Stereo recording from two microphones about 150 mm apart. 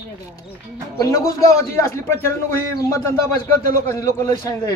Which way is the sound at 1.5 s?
20° left (ahead or behind).